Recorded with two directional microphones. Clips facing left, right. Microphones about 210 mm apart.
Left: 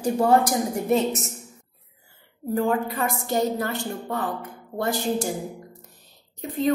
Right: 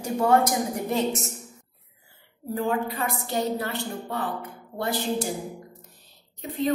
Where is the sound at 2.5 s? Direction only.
45° left (ahead or behind).